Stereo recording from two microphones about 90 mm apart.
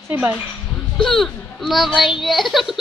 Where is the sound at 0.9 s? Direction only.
Centre (ahead or behind).